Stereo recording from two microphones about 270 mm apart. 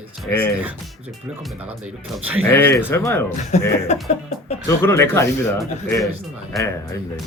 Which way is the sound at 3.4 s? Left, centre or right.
Left.